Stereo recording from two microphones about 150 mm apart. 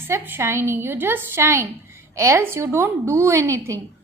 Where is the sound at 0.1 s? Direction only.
15° right (ahead or behind).